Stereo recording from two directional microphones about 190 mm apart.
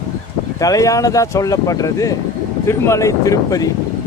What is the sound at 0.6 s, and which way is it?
Speech, 15° left (ahead or behind).